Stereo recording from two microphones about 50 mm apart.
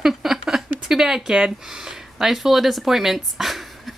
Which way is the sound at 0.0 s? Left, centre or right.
Centre.